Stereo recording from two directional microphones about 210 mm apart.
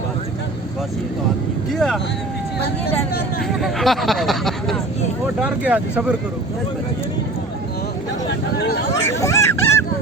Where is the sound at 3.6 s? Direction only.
Centre (ahead or behind).